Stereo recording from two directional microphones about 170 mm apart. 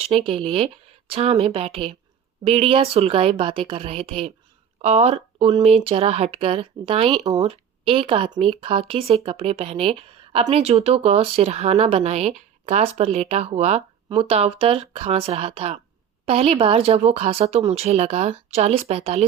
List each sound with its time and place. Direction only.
0.0 s speech: 35° right (ahead or behind)